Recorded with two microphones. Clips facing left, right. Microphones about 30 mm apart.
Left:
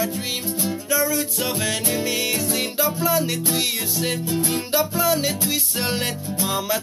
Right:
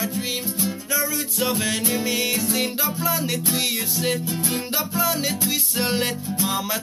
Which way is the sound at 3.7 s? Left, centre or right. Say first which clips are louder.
Even; centre.